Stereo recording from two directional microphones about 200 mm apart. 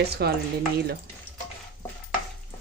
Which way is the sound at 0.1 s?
50° right (ahead or behind).